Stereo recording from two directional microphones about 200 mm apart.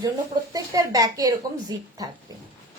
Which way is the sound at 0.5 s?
15° right (ahead or behind).